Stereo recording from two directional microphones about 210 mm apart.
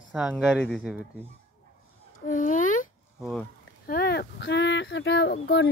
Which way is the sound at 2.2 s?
35° left (ahead or behind).